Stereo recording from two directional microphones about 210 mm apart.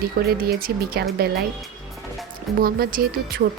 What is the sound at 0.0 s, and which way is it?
A woman's voice, 45° right (ahead or behind).